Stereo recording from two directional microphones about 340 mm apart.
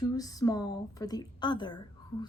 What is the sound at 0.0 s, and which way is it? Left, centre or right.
Speech, centre.